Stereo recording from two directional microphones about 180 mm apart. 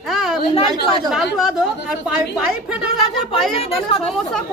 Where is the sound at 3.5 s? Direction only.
30° left (ahead or behind).